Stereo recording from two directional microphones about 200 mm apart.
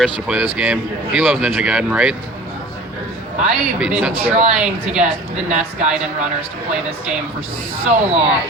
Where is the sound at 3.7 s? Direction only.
5° right (ahead or behind).